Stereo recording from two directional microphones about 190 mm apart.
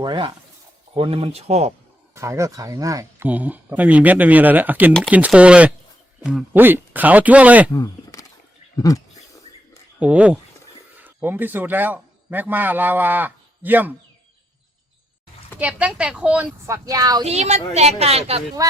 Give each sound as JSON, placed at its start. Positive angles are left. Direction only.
{"t": 0.0, "sound": "a woman's voice", "side_deg": -25}
{"t": 2.1, "sound": "speech", "side_deg": -15}
{"t": 7.7, "sound": "a sound", "side_deg": 20}
{"t": 8.7, "sound": "speech", "side_deg": 20}
{"t": 10.0, "sound": "a man's voice", "side_deg": -5}
{"t": 15.5, "sound": "speech", "side_deg": -5}
{"t": 17.2, "sound": "a woman's voice", "side_deg": -35}